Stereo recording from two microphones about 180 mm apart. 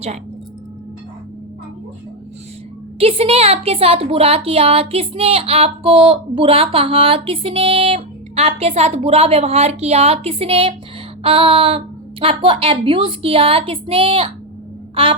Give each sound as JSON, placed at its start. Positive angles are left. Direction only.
{"t": 3.0, "sound": "a woman's voice", "side_deg": -30}